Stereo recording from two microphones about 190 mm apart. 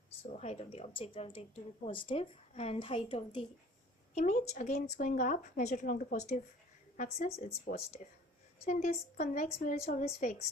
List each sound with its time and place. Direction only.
0.2 s a woman's voice: 35° left (ahead or behind)
4.1 s a woman's voice: 40° left (ahead or behind)